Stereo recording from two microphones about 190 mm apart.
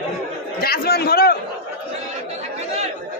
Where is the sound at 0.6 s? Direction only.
55° left (ahead or behind).